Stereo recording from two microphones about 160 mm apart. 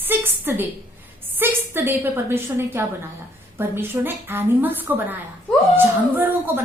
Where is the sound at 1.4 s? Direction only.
15° right (ahead or behind).